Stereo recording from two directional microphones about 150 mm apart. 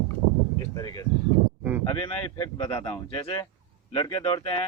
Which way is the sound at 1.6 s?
10° right (ahead or behind).